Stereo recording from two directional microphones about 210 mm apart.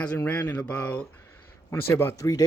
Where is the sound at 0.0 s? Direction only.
5° left (ahead or behind).